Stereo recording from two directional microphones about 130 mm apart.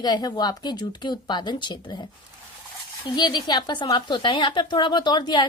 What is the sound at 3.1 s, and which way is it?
A woman's voice, 35° left (ahead or behind).